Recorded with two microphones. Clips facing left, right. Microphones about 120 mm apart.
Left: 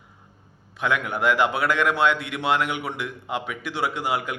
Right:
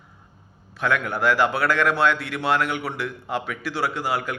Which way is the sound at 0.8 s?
20° left (ahead or behind).